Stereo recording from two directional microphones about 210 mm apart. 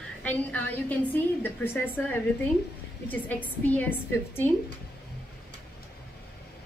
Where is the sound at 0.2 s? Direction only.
5° left (ahead or behind).